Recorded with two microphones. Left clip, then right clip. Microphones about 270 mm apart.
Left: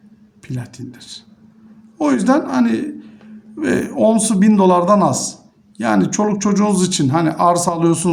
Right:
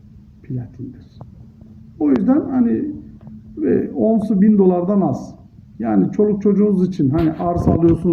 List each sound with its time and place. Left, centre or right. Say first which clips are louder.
0.4 s speech: left 1 dB; centre